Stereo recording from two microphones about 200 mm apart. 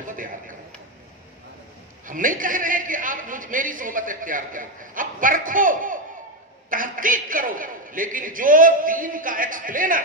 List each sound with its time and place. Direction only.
2.0 s a man's voice: 40° right (ahead or behind)